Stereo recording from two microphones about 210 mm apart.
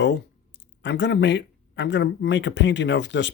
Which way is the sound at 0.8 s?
55° left (ahead or behind).